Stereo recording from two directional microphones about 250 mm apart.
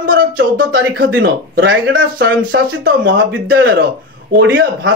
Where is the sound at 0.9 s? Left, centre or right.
Right.